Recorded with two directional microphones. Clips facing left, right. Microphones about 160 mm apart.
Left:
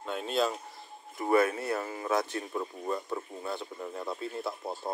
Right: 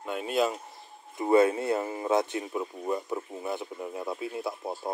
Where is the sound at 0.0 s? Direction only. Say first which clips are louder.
Right 2 dB; 10° right (ahead or behind).